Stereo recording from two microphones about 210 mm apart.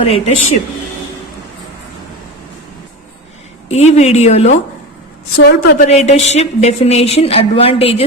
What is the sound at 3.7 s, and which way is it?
Speech, 30° left (ahead or behind).